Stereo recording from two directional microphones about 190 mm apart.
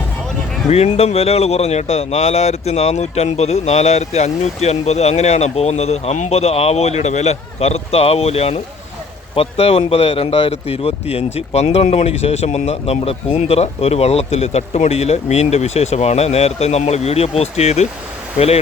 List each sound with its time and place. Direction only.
0.7 s speech: 35° left (ahead or behind)